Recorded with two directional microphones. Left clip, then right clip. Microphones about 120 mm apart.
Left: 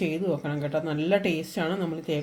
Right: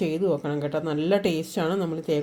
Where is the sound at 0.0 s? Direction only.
45° right (ahead or behind).